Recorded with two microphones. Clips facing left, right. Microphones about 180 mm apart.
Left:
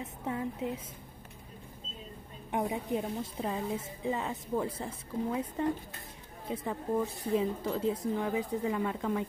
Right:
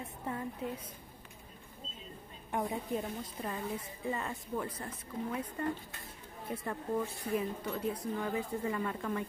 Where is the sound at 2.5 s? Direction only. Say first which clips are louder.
Left 3 dB; 20° left (ahead or behind).